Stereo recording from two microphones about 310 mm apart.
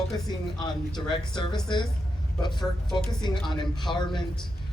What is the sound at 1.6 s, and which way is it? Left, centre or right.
Speech, centre.